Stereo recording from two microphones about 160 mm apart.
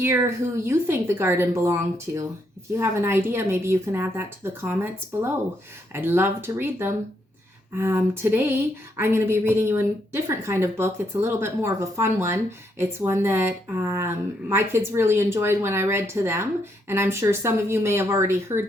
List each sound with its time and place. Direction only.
0.0 s a woman's voice: 15° right (ahead or behind)